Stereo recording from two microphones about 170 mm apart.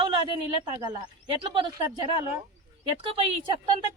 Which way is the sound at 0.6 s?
25° right (ahead or behind).